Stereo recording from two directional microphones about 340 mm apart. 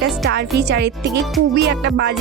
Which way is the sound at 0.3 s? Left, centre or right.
Right.